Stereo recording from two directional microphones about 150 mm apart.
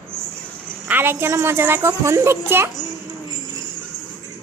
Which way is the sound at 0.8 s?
15° right (ahead or behind).